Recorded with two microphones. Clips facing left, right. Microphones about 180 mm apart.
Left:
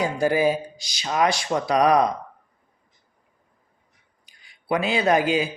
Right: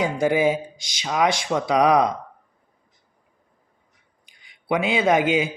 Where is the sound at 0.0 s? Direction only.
20° right (ahead or behind).